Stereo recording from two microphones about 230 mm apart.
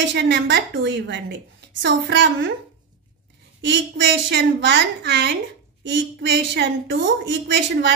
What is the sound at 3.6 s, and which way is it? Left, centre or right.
A woman's voice, right.